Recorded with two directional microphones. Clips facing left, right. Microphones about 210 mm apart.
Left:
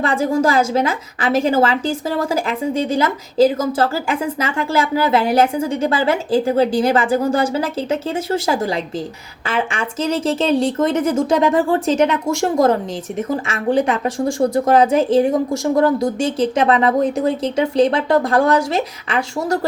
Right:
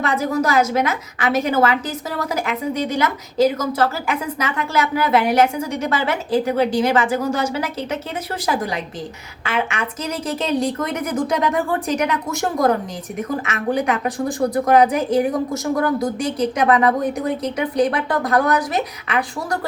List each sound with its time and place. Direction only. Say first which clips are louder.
0.0 s a woman's voice: left 3 dB; 30° left (ahead or behind)